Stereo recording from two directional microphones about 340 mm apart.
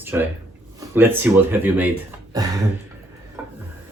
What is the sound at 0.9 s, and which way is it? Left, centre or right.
Speech, centre.